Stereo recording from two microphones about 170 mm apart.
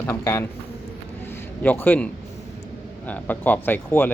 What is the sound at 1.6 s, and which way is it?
A man's voice, 10° left (ahead or behind).